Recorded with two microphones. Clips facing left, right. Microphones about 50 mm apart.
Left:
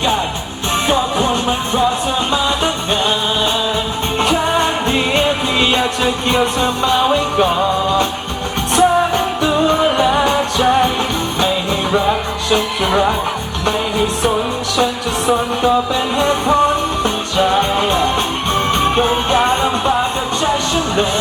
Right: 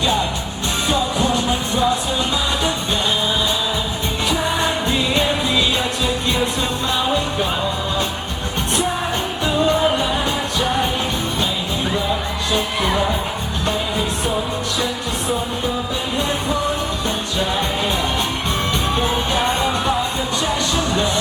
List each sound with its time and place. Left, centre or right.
0.9 s music: left
4.9 s music: left
8.7 s music: left
11.3 s music: left
16.1 s music: left
18.7 s music: left